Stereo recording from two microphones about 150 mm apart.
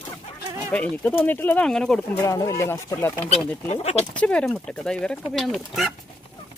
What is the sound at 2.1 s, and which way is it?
Speech, 20° left (ahead or behind).